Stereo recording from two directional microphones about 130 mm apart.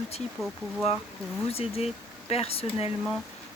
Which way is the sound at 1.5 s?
50° left (ahead or behind).